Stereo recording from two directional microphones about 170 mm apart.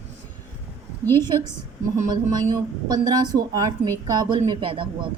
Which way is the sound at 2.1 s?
25° right (ahead or behind).